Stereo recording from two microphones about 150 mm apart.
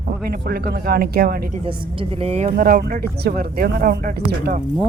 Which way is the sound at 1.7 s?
35° right (ahead or behind).